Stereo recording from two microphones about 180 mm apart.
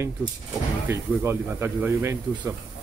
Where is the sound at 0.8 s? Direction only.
15° right (ahead or behind).